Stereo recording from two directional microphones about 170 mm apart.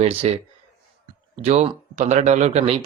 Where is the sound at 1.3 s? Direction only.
40° right (ahead or behind).